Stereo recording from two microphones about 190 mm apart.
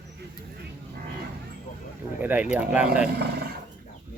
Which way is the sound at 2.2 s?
10° right (ahead or behind).